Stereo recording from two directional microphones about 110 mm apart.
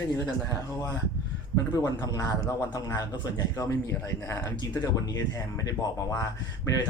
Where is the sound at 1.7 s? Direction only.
35° left (ahead or behind).